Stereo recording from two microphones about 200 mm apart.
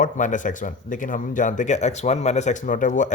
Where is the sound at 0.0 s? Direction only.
40° left (ahead or behind).